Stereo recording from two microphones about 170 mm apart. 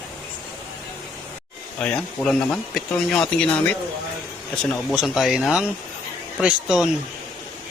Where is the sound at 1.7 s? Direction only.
5° left (ahead or behind).